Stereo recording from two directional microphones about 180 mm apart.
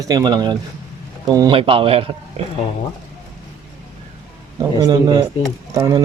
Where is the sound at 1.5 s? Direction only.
30° right (ahead or behind).